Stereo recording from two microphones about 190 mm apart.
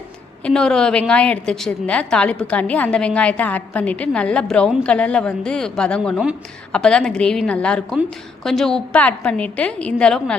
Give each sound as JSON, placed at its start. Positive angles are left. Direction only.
{"t": 0.4, "sound": "a woman's voice", "side_deg": 5}